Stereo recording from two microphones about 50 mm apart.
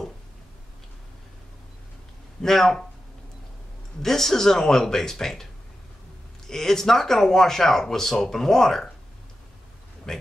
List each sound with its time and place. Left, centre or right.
2.4 s speech: centre
4.0 s speech: centre
10.1 s speech: centre